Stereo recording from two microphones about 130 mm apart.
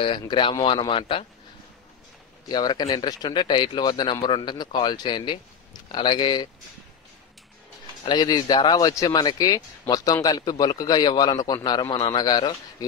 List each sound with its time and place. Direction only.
0.0 s a man's voice: 40° left (ahead or behind)
2.4 s a man's voice: 30° left (ahead or behind)
8.0 s a man's voice: 35° left (ahead or behind)
11.8 s a man's voice: 45° left (ahead or behind)
12.2 s a man's voice: 35° left (ahead or behind)